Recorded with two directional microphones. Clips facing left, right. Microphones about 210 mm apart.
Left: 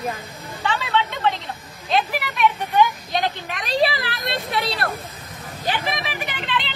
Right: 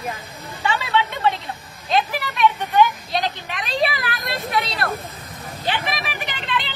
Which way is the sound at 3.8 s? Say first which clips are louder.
Even; 30° left (ahead or behind).